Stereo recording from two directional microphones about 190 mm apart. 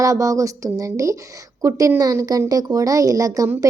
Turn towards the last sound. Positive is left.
turn(degrees=-15)  # may be behind; listen again after turning